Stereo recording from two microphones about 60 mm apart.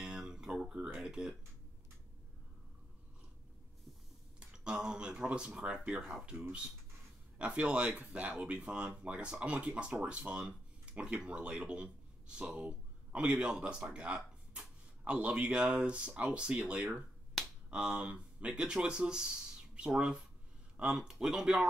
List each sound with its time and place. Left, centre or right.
0.0 s a sound: centre
4.4 s speech: centre
5.9 s speech: centre
7.3 s speech: centre
20.9 s speech: centre